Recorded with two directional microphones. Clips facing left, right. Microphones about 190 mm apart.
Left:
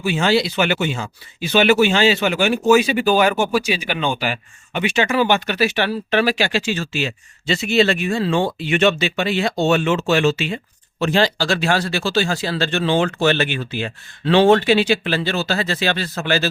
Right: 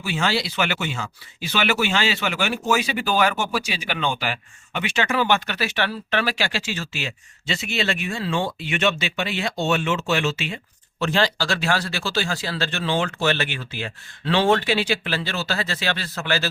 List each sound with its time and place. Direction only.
0.0 s speech: 20° left (ahead or behind)
11.1 s speech: 20° left (ahead or behind)